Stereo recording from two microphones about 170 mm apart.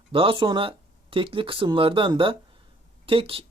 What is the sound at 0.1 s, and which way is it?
Speech, 30° right (ahead or behind).